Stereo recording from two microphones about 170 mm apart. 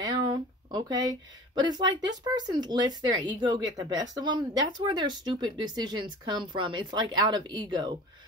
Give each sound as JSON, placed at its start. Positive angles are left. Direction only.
{"t": 0.0, "sound": "speech", "side_deg": -25}